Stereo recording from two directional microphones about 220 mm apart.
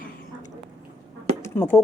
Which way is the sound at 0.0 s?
40° left (ahead or behind).